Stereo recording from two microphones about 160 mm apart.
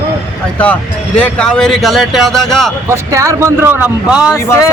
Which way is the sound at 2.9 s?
20° right (ahead or behind).